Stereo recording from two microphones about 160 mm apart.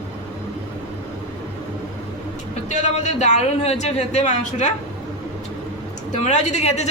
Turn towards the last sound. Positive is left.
turn(degrees=45)  # may be behind; listen again after turning